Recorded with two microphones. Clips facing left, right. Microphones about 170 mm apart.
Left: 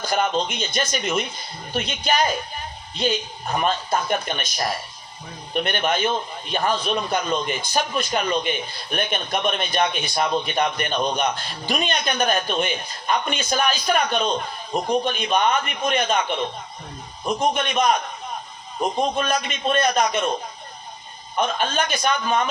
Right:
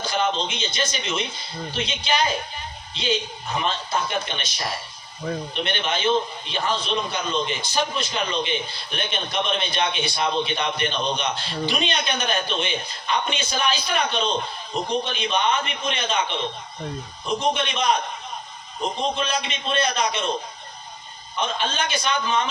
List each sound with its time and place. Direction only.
0.0 s a man's voice: 50° left (ahead or behind)
3.6 s a man's voice: 55° left (ahead or behind)
17.5 s a man's voice: 50° left (ahead or behind)
19.1 s a man's voice: 50° left (ahead or behind)
21.3 s a man's voice: 55° left (ahead or behind)